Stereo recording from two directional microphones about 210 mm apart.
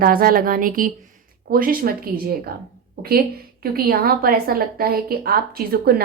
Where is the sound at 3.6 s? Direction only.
45° right (ahead or behind).